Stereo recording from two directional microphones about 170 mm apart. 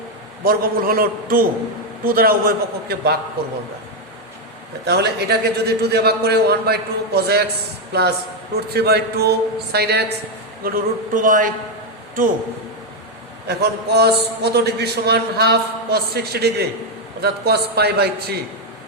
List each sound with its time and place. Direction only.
0.4 s a man's voice: 60° right (ahead or behind)
4.9 s a man's voice: 75° right (ahead or behind)
10.6 s speech: 60° right (ahead or behind)
13.5 s a man's voice: 75° right (ahead or behind)